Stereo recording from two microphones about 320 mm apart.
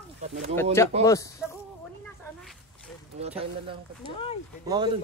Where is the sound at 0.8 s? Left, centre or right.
Centre.